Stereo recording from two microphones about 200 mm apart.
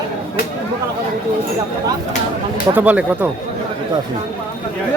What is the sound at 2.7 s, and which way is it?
Speech, 10° right (ahead or behind).